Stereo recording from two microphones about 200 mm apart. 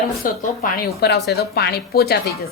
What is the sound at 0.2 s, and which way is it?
A woman's voice, 45° left (ahead or behind).